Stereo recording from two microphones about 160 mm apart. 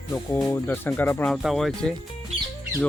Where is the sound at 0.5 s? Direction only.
15° left (ahead or behind).